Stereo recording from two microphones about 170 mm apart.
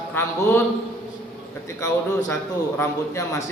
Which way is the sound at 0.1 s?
15° left (ahead or behind).